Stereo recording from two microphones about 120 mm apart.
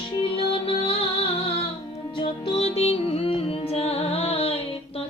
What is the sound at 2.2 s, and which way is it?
Music, 55° left (ahead or behind).